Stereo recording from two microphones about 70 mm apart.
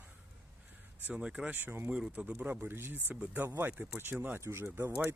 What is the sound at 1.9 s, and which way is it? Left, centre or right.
Speech, centre.